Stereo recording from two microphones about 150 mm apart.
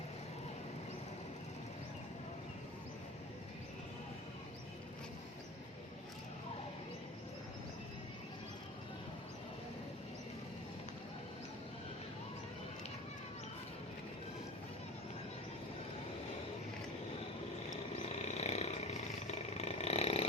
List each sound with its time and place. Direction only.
17.7 s roar: 50° left (ahead or behind)